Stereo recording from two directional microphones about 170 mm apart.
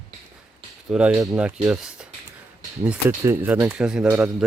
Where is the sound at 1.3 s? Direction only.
5° right (ahead or behind).